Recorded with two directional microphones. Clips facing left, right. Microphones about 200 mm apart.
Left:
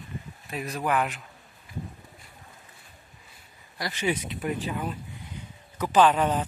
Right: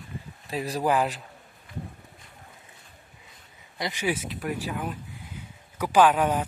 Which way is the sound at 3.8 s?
15° right (ahead or behind).